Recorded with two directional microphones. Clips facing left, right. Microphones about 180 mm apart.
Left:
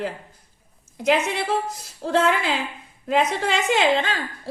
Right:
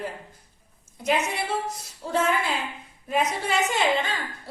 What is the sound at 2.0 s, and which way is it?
Speech, 90° left.